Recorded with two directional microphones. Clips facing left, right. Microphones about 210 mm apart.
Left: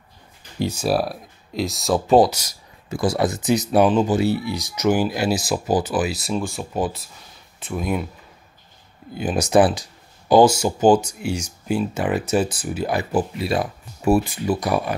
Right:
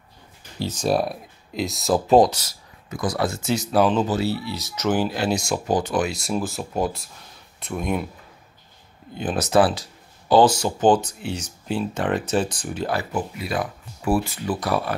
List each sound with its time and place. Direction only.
0.6 s speech: 10° left (ahead or behind)
2.9 s speech: 30° left (ahead or behind); by 8.1 s centre (ahead or behind)
9.1 s speech: 10° left (ahead or behind)
13.1 s speech: 30° left (ahead or behind); by 15.0 s 15° left (ahead or behind)